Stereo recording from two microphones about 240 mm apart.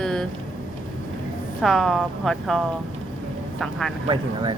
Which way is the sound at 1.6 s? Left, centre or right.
Centre.